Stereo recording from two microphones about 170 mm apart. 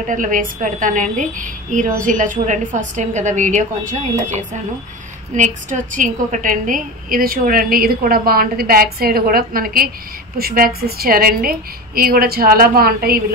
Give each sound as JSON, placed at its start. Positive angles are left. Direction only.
{"t": 0.1, "sound": "a woman's voice", "side_deg": -50}